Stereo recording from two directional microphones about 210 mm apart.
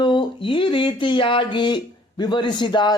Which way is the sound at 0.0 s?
20° left (ahead or behind).